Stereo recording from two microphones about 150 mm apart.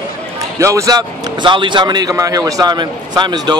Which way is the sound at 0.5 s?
20° right (ahead or behind).